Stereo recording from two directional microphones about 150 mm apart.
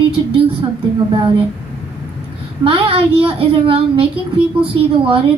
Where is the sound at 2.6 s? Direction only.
35° right (ahead or behind).